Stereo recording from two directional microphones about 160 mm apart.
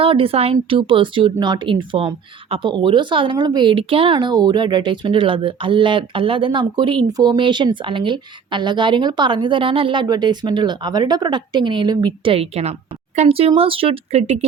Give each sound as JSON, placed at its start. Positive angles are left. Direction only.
{"t": 0.0, "sound": "speech", "side_deg": -35}